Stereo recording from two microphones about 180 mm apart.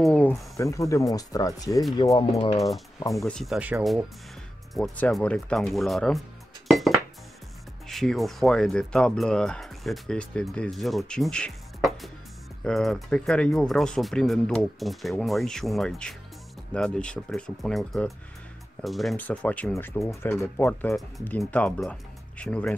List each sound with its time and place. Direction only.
0.0 s speech: 10° left (ahead or behind); by 2.6 s 25° left (ahead or behind)
3.2 s speech: centre (ahead or behind)
6.7 s dishes: centre (ahead or behind)
7.9 s speech: centre (ahead or behind)